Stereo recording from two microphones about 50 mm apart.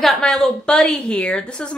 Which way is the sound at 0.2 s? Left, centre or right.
Centre.